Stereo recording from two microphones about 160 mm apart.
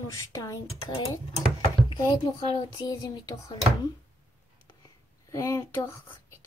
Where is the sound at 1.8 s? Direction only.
25° left (ahead or behind).